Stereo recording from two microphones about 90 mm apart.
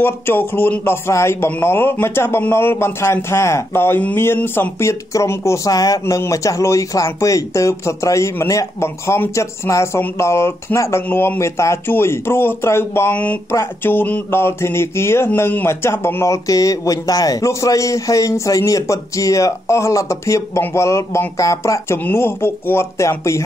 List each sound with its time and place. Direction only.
0.0 s speech: 25° left (ahead or behind)
11.1 s mantra: 25° left (ahead or behind)
16.4 s speech: 40° left (ahead or behind)
21.9 s mantra: 25° left (ahead or behind)